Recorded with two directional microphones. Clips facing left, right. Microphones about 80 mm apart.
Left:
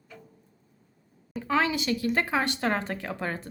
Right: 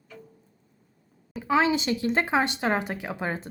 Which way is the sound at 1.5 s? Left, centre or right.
Centre.